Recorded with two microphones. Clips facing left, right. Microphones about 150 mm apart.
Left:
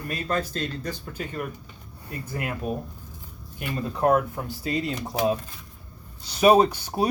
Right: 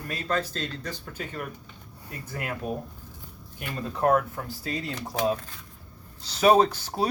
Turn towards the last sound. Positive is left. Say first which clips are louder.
# left 2 dB
turn(degrees=15)  # may be behind; listen again after turning